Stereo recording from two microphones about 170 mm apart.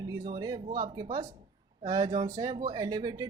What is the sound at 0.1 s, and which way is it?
Speech, 25° right (ahead or behind).